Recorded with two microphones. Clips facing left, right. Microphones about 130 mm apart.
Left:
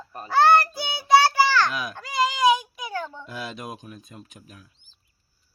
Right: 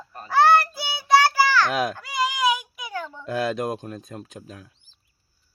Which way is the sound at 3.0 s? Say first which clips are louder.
Left 1 dB; 15° left (ahead or behind).